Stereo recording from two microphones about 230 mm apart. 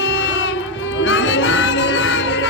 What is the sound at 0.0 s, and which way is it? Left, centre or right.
Music, left.